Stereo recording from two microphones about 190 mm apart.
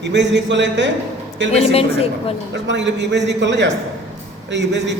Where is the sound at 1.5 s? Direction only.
30° left (ahead or behind).